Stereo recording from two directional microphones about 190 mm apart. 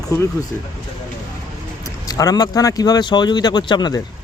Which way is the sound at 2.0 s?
20° left (ahead or behind).